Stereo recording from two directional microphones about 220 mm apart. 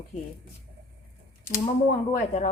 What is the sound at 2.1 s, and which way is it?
Speech, 35° left (ahead or behind).